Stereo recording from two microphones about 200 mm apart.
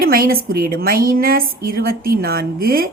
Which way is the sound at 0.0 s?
45° right (ahead or behind).